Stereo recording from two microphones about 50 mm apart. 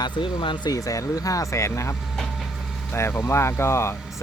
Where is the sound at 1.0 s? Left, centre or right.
Left.